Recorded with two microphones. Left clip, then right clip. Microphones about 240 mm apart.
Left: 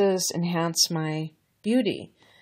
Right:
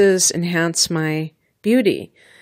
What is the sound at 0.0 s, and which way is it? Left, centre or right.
Speech, right.